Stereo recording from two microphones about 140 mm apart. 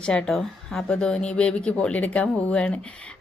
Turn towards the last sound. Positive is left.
turn(degrees=10)  # may be behind; listen again after turning